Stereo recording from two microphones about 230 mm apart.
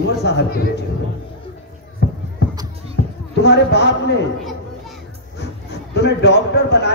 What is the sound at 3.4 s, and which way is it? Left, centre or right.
Speech, left.